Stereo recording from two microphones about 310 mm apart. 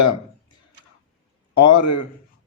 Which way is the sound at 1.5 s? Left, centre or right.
Left.